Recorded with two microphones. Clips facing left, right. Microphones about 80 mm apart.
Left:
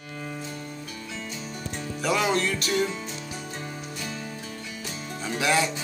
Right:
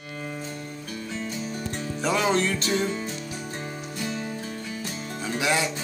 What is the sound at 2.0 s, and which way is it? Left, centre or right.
Music, right.